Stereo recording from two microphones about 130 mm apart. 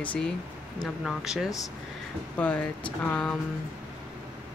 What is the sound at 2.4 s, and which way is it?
Speech, 10° left (ahead or behind).